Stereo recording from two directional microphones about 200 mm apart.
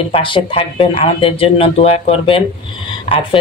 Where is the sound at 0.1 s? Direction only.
25° left (ahead or behind).